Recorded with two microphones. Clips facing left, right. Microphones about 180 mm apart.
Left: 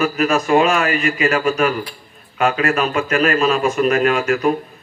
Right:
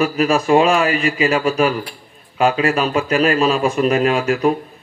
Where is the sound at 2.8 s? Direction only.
35° right (ahead or behind).